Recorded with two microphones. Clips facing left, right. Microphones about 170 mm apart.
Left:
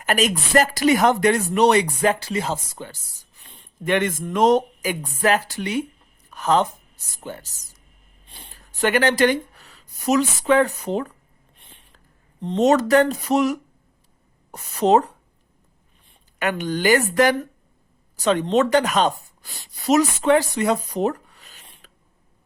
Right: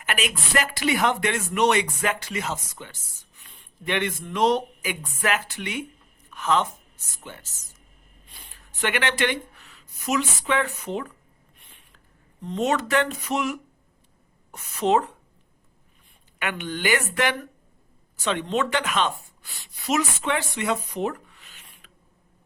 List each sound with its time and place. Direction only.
0.0 s speech: 40° left (ahead or behind)
11.5 s a sound: 30° left (ahead or behind)
12.4 s speech: 35° left (ahead or behind)
16.4 s a woman's voice: 40° left (ahead or behind)